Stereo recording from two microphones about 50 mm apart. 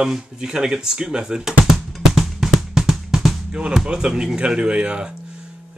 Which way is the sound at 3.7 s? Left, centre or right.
Centre.